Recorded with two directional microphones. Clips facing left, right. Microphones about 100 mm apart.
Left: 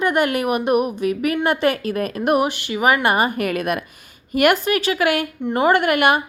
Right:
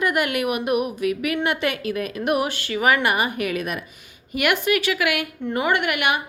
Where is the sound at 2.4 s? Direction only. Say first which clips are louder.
Left 3 dB; 20° left (ahead or behind); by 3.8 s 55° left (ahead or behind).